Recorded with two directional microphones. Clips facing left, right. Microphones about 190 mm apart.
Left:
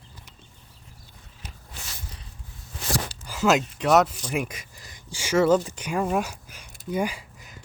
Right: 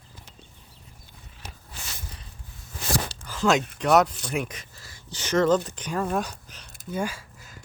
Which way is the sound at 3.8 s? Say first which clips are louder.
Even; centre (ahead or behind).